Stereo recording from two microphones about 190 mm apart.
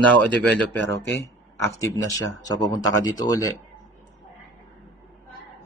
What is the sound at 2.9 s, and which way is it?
Speech, 20° left (ahead or behind).